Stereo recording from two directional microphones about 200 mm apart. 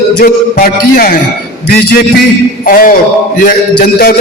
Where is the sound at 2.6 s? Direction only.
45° left (ahead or behind).